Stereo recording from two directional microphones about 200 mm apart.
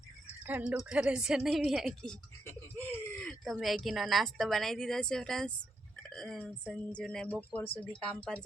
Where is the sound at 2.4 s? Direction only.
15° left (ahead or behind).